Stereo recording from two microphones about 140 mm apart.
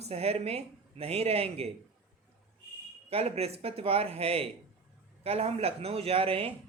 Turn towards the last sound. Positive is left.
turn(degrees=-45)  # may be behind; listen again after turning